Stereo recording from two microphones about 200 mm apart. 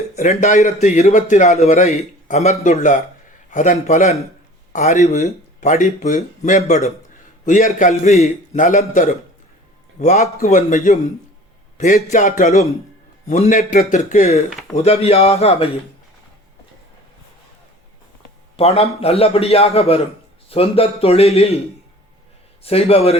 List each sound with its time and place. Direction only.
0.2 s a man's voice: 35° left (ahead or behind)
18.5 s a man's voice: 30° left (ahead or behind)
22.6 s a man's voice: 30° left (ahead or behind)